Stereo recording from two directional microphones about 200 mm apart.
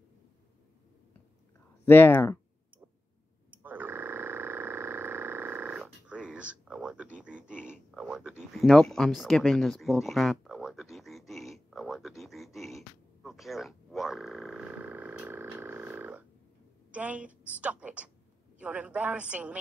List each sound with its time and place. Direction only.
1.9 s speech: 10° left (ahead or behind)
3.6 s a sound: 10° right (ahead or behind)
7.9 s a woman's voice: 5° right (ahead or behind)